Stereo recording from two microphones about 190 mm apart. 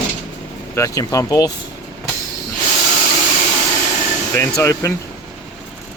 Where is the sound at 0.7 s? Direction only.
15° left (ahead or behind).